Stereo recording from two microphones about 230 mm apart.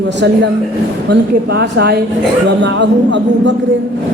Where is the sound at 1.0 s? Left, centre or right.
Right.